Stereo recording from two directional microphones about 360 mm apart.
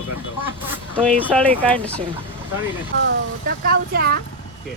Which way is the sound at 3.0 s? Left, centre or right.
Right.